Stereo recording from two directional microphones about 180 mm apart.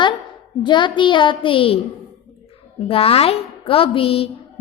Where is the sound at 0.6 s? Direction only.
25° left (ahead or behind).